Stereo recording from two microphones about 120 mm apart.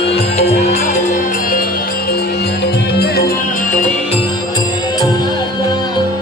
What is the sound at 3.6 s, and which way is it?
Music, 90° left.